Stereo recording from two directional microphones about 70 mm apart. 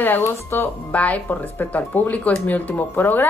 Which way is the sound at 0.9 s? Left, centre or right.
Left.